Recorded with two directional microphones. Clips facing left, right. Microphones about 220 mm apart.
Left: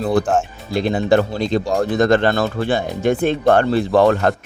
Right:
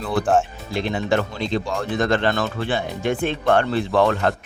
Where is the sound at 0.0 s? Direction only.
40° left (ahead or behind).